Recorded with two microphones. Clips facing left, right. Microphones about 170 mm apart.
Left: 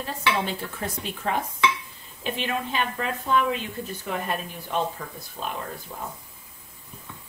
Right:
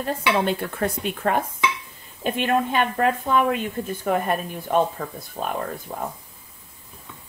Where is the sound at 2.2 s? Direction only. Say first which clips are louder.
Right 7 dB; 50° right (ahead or behind).